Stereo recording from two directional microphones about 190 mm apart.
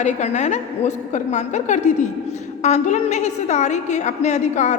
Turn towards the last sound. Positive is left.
turn(degrees=35)  # may be behind; listen again after turning